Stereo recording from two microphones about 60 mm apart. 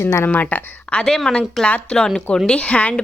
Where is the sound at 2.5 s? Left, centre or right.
Left.